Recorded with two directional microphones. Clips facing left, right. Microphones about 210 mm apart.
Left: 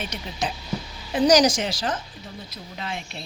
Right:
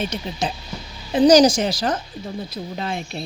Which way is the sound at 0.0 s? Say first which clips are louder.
Right 5 dB; 30° right (ahead or behind).